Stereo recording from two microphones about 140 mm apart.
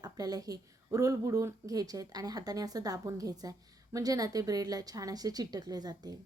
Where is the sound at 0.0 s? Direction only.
25° right (ahead or behind).